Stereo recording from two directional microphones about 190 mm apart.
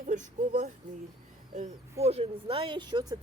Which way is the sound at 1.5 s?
35° right (ahead or behind).